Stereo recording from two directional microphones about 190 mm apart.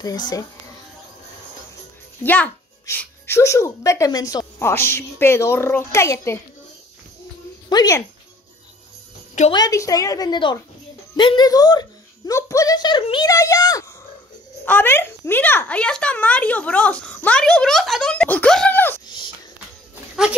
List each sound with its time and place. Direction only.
0.0 s a woman's voice: 20° left (ahead or behind)
2.2 s speech: 10° left (ahead or behind)
7.7 s a woman's voice: 20° left (ahead or behind)
9.5 s a woman's voice: 20° left (ahead or behind)
19.0 s a sound: 25° left (ahead or behind)